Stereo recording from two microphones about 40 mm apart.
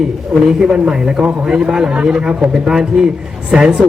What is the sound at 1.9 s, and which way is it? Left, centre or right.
Speech, right.